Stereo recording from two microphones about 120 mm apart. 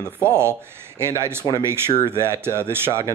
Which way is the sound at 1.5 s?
20° right (ahead or behind).